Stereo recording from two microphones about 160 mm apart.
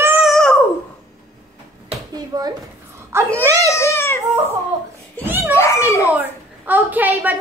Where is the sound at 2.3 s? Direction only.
25° right (ahead or behind).